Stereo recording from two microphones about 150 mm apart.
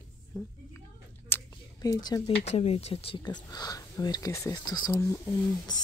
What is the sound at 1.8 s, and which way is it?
Speech, 25° left (ahead or behind).